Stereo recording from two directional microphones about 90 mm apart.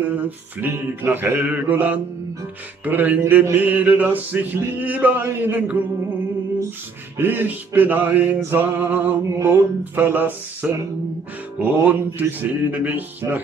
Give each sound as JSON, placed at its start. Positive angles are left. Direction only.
{"t": 0.1, "sound": "male singing", "side_deg": -25}
{"t": 7.2, "sound": "male singing", "side_deg": -20}